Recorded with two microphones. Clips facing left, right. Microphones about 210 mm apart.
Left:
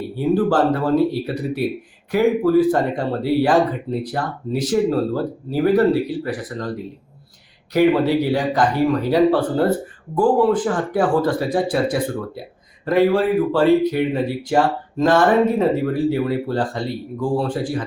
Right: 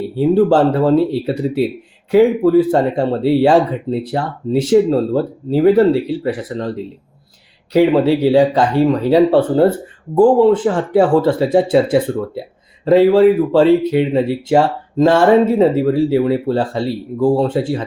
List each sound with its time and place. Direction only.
0.2 s speech: 25° right (ahead or behind)
7.7 s speech: 30° right (ahead or behind)